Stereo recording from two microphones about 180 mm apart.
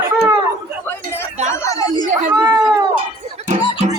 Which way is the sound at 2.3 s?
15° right (ahead or behind).